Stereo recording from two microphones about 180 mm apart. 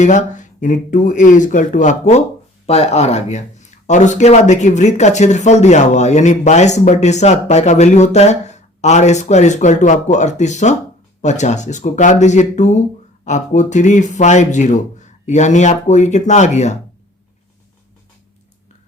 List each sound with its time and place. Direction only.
0.0 s speech: 45° left (ahead or behind)